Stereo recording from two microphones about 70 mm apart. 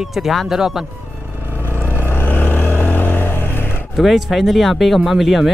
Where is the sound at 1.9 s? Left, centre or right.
Left.